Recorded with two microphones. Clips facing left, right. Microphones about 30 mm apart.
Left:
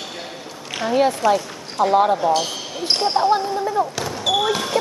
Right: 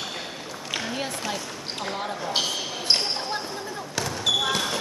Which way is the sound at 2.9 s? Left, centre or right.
Centre.